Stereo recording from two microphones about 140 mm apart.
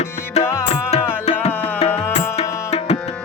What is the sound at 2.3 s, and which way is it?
Tabla, 45° left (ahead or behind).